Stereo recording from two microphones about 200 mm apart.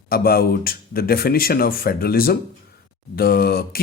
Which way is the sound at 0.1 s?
50° left (ahead or behind).